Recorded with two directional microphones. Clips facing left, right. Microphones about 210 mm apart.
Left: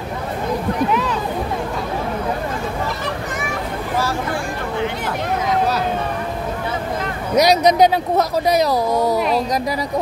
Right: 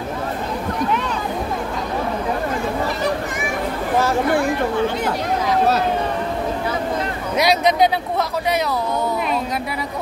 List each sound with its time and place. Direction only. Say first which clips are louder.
7.3 s speech: left 4 dB; 40° left (ahead or behind)